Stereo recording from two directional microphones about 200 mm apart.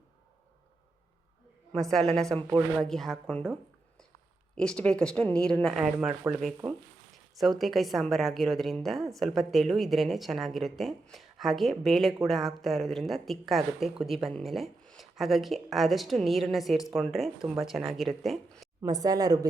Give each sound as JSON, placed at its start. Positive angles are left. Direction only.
{"t": 2.7, "sound": "speech", "side_deg": 0}
{"t": 18.8, "sound": "a woman's voice", "side_deg": -15}